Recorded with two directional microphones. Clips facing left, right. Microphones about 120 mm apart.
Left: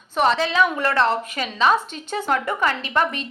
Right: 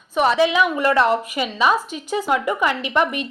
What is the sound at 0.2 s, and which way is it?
A woman's voice, 10° right (ahead or behind).